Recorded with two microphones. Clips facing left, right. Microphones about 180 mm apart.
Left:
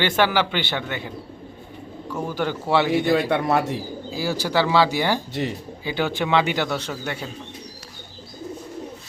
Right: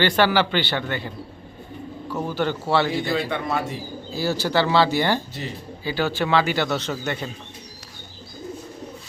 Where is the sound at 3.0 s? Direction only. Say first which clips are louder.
Left 5 dB; 60° left (ahead or behind).